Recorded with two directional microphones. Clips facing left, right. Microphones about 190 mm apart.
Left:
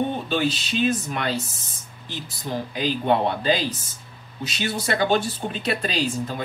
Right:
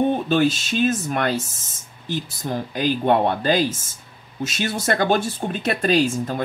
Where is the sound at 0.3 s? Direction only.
45° right (ahead or behind).